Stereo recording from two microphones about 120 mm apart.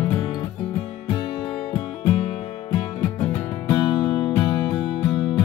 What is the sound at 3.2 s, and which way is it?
Music, 20° left (ahead or behind).